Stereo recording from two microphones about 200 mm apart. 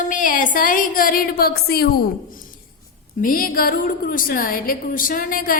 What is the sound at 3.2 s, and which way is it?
A woman's voice, 45° left (ahead or behind).